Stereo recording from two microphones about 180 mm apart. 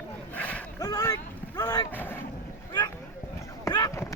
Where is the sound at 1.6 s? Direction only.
20° left (ahead or behind).